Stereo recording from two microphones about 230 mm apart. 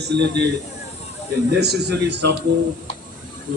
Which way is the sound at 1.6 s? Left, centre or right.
Right.